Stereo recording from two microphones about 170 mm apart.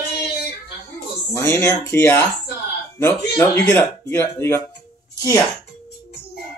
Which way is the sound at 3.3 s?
15° left (ahead or behind).